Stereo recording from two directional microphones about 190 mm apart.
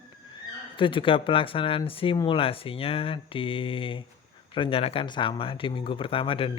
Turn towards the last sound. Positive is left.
turn(degrees=30)  # may be behind; listen again after turning